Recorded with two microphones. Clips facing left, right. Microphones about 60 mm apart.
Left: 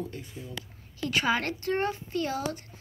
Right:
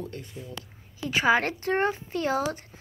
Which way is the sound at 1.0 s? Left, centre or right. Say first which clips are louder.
Right 4 dB; right.